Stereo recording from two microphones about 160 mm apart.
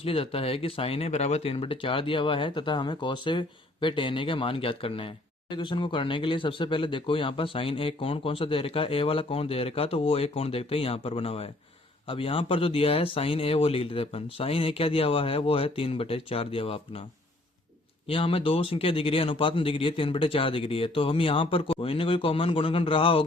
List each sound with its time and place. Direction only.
0.0 s speech: 35° left (ahead or behind)
18.1 s speech: 35° left (ahead or behind)